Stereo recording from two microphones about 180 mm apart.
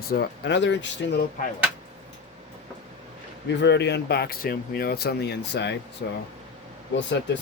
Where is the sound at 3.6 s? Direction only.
75° left (ahead or behind).